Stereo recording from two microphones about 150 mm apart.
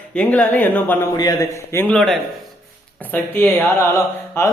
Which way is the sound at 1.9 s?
5° left (ahead or behind).